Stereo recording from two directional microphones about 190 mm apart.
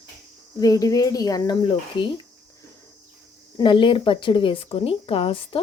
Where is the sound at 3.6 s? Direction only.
25° left (ahead or behind).